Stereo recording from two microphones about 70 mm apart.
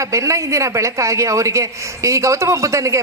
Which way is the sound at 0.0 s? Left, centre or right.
Right.